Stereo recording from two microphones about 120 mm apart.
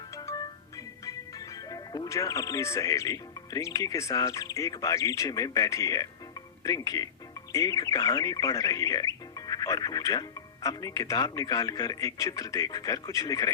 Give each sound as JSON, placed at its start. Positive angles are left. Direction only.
{"t": 0.2, "sound": "music", "side_deg": 35}
{"t": 1.7, "sound": "speech", "side_deg": 35}